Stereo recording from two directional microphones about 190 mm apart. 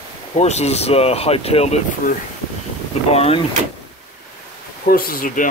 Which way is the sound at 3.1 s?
30° left (ahead or behind).